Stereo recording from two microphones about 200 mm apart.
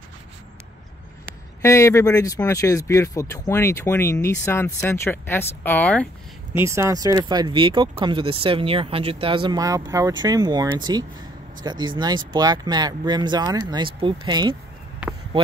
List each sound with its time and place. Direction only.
1.6 s speech: 15° left (ahead or behind)
6.5 s speech: 15° right (ahead or behind)
15.0 s a sound: 5° right (ahead or behind)